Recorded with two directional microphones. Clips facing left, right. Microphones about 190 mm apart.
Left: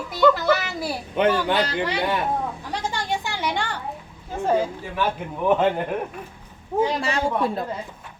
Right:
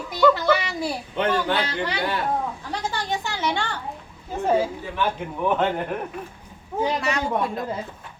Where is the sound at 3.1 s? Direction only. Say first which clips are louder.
Right 1 dB; 15° left (ahead or behind).